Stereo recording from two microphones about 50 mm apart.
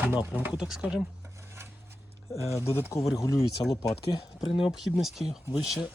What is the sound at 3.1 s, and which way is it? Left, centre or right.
Speech, left.